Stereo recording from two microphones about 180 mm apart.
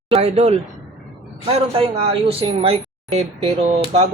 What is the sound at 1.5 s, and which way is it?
A woman's voice, 35° right (ahead or behind).